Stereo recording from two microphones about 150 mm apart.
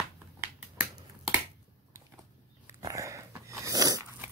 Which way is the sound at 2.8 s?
20° right (ahead or behind).